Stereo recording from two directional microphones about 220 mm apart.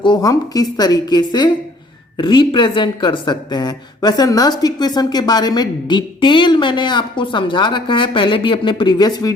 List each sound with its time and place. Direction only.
0.0 s a woman's voice: 20° left (ahead or behind)